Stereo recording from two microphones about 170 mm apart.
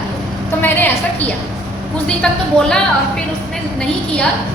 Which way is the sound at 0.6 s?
10° left (ahead or behind).